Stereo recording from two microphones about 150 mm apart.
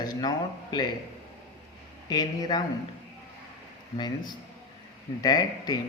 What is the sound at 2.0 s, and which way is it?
Speech, 25° left (ahead or behind).